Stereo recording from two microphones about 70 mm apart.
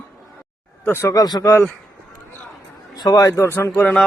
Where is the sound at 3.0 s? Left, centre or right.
Left.